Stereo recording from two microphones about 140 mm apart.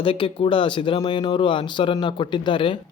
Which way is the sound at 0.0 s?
40° left (ahead or behind).